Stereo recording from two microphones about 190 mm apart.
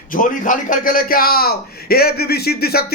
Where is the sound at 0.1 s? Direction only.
45° left (ahead or behind).